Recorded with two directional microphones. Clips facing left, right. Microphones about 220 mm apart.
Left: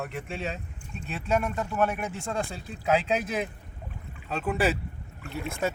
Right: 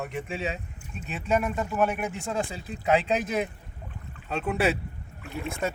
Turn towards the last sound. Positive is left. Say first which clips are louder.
# even
turn(degrees=0)  # may be behind; listen again after turning